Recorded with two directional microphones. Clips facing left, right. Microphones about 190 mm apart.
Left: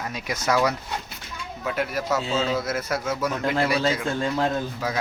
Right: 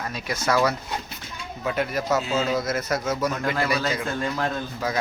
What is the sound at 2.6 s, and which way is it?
Speech, 5° left (ahead or behind).